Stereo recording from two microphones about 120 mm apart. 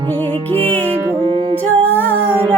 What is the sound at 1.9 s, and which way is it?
Child singing, 15° left (ahead or behind).